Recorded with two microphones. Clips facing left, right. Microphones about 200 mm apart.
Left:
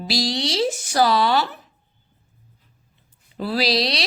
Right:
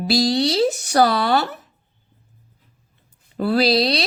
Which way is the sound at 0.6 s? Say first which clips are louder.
Right 3 dB; 40° right (ahead or behind).